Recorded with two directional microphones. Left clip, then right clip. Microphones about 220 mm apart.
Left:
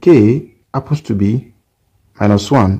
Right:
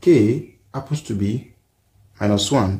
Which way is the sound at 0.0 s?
35° left (ahead or behind).